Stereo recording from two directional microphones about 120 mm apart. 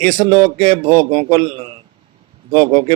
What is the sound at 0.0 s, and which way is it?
A man's voice, 50° right (ahead or behind).